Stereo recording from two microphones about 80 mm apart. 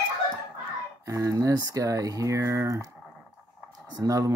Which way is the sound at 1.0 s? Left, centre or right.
Right.